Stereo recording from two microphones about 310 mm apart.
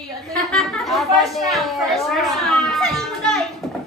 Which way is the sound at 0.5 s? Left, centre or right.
Centre.